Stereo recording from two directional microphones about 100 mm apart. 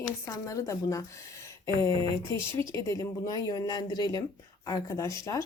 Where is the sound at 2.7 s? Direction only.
30° left (ahead or behind).